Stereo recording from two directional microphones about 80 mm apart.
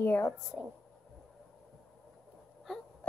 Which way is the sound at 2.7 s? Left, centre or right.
Centre.